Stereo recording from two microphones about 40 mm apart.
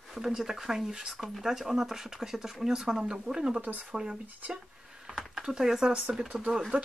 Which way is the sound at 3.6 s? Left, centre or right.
Right.